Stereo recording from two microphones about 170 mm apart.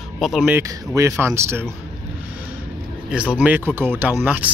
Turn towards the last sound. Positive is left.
turn(degrees=-10)  # may be behind; listen again after turning